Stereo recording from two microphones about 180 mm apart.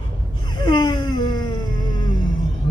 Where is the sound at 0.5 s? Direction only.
25° left (ahead or behind).